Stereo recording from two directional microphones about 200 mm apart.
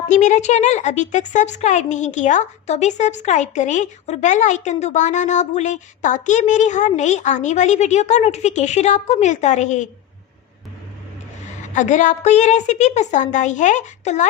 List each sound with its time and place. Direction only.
0.1 s speech: 35° left (ahead or behind)
11.7 s speech: 40° left (ahead or behind)